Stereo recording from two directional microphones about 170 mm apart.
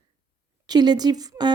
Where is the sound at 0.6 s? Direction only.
25° right (ahead or behind).